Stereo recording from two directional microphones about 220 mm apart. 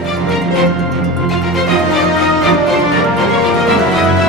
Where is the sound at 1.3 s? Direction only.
Centre (ahead or behind).